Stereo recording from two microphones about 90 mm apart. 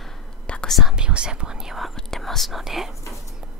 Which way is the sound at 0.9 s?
10° right (ahead or behind).